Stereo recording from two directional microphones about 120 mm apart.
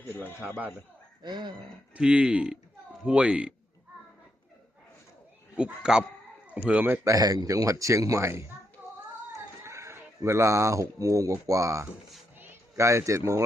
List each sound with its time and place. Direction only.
0.1 s speech: 15° left (ahead or behind)
1.2 s speech: 40° right (ahead or behind)
2.0 s speech: 5° right (ahead or behind)
5.5 s speech: 5° right (ahead or behind)
7.0 s speech: 30° right (ahead or behind)
9.6 s speech: 25° right (ahead or behind)